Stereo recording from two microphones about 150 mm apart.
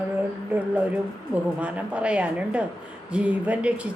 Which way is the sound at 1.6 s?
10° right (ahead or behind).